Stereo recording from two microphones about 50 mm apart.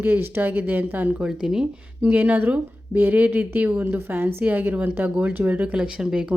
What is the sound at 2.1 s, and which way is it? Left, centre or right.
Speech, right.